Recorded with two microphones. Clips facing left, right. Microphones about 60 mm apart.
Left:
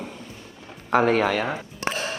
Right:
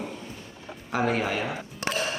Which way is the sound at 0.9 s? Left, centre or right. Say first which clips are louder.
Left 6 dB; left.